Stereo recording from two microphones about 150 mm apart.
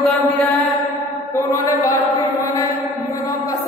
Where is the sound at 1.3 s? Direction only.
20° left (ahead or behind).